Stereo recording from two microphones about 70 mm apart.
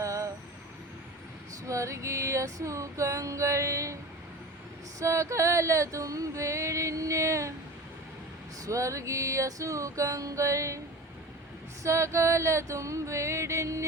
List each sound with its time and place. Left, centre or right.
0.0 s vehicle: right
1.6 s female singing: right
4.9 s music: right
8.6 s female singing: right
11.8 s female singing: right